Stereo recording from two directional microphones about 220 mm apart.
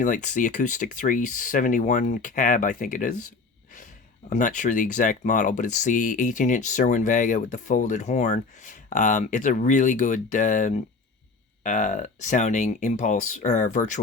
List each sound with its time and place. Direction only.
0.0 s speech: 35° left (ahead or behind)
4.3 s speech: 35° left (ahead or behind)